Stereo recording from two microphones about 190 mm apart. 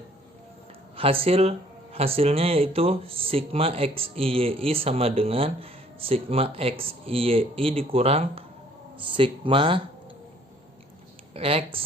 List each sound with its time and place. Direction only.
0.9 s speech: 30° right (ahead or behind)
11.3 s speech: 30° right (ahead or behind)